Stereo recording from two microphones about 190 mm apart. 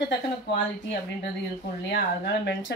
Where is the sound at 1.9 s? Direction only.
65° left (ahead or behind).